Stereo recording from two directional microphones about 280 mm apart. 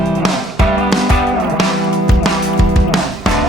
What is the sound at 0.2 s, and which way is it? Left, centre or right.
Music, centre.